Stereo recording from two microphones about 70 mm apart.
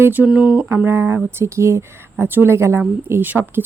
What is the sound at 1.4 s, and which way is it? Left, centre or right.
Speech, right.